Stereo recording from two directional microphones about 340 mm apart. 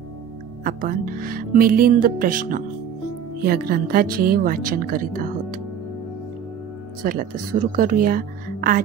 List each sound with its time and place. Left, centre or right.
0.7 s a woman's voice: right
7.0 s a woman's voice: right